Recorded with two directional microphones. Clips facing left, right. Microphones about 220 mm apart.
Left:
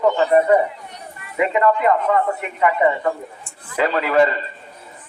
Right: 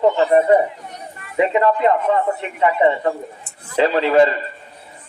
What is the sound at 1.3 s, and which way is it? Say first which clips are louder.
A man's voice: right 1 dB; 25° right (ahead or behind).